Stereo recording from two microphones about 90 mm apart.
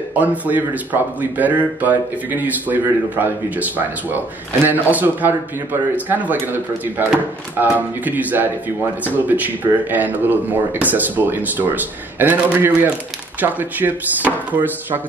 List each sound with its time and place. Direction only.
0.1 s speech: 20° right (ahead or behind)